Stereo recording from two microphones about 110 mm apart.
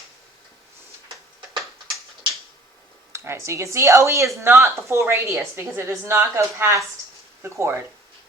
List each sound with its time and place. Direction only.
3.1 s speech: 25° right (ahead or behind)